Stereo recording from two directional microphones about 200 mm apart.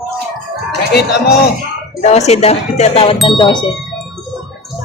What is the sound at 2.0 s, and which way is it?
Speech, 35° left (ahead or behind).